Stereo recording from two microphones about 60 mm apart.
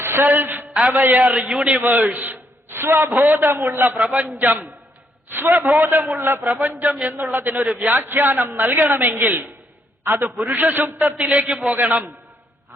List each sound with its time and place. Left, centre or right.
0.0 s a sound: right
0.7 s a man's voice: centre
0.9 s a man's voice: right
1.8 s a man's voice: right
6.4 s speech: centre
7.1 s a woman's voice: right
10.2 s a woman's voice: right
11.3 s a man's voice: right